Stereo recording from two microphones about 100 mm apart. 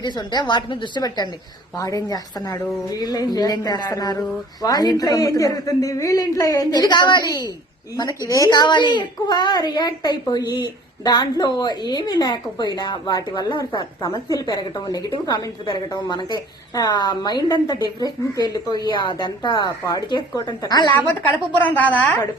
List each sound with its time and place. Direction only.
0.0 s a woman's voice: 45° left (ahead or behind)
8.4 s a woman's voice: 50° left (ahead or behind)
21.6 s a woman's voice: 15° left (ahead or behind)